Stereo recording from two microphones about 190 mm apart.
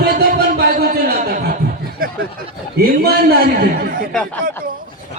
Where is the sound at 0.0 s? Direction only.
55° right (ahead or behind).